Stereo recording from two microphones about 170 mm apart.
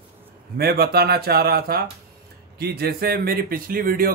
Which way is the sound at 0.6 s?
65° right (ahead or behind).